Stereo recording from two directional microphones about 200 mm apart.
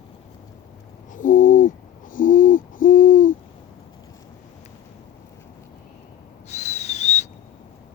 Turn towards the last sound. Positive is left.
turn(degrees=35)  # may be behind; listen again after turning